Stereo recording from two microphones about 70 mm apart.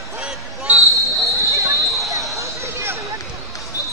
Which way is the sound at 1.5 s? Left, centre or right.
Right.